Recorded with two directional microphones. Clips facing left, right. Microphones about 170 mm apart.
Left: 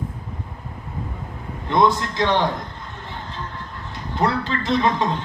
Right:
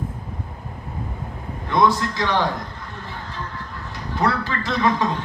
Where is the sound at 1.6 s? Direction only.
20° left (ahead or behind).